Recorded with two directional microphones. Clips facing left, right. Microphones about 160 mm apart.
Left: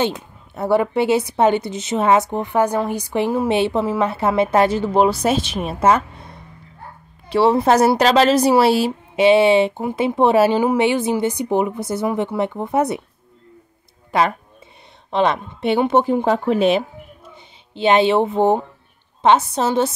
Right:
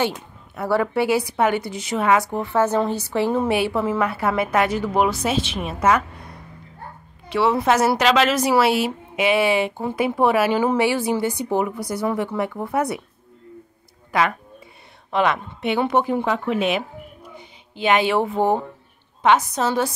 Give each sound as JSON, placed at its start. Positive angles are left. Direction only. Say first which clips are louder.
{"t": 0.6, "sound": "a woman's voice", "louder": "left 3 dB", "side_deg": 20}
{"t": 5.2, "sound": "speech", "louder": "left 4 dB", "side_deg": 40}
{"t": 7.2, "sound": "a woman's voice", "louder": "left 4 dB", "side_deg": 35}
{"t": 14.1, "sound": "a woman's voice", "louder": "left 3 dB", "side_deg": 25}